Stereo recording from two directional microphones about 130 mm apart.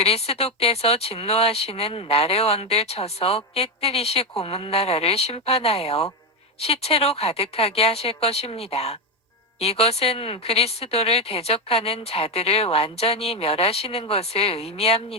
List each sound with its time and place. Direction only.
0.0 s speech: 50° left (ahead or behind)